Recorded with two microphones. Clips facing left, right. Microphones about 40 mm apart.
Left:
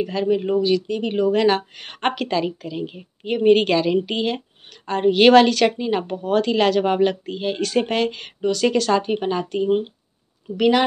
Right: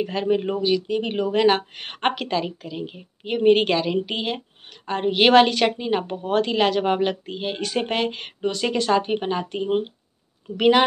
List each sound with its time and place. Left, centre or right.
0.0 s speech: right
0.7 s speech: centre
1.0 s speech: right
2.0 s speech: centre
7.8 s speech: right